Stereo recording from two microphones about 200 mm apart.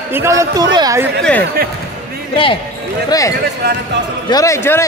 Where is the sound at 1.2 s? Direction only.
5° left (ahead or behind).